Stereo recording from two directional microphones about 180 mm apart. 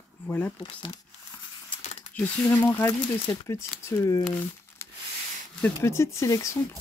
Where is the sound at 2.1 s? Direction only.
10° left (ahead or behind).